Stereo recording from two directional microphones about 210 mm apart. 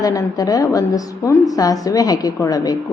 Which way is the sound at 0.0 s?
15° left (ahead or behind).